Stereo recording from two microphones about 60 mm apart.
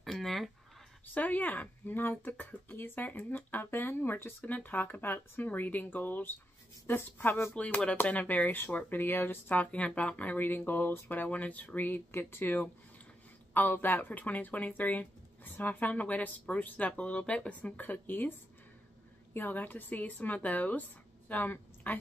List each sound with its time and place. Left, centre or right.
0.0 s a sound: centre
1.1 s speech: left
4.4 s speech: left
7.5 s speech: centre; by 11.1 s left
11.1 s speech: left
12.1 s speech: left
19.3 s speech: left